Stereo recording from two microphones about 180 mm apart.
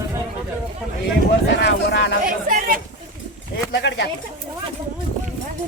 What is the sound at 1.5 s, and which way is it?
Speech, 75° left (ahead or behind).